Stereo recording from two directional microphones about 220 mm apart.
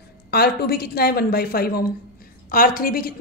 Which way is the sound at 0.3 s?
45° left (ahead or behind).